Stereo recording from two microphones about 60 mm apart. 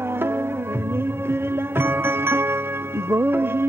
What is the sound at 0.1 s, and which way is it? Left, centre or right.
Music, right.